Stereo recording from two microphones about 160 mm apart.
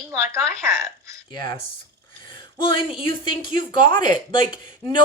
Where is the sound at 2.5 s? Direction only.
35° left (ahead or behind).